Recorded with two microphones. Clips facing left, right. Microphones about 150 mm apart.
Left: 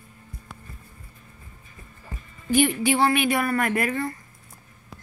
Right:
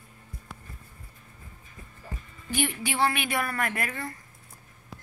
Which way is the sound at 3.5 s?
20° left (ahead or behind).